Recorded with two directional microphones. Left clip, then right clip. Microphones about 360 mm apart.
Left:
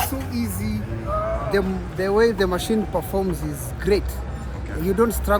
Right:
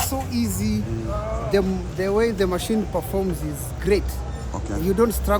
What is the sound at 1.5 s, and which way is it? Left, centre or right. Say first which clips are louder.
Speech: right 1 dB; centre.